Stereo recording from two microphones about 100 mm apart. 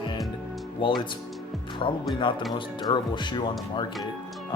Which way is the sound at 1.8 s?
60° left (ahead or behind).